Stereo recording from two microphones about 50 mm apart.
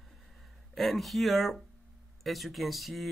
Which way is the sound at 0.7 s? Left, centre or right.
Centre.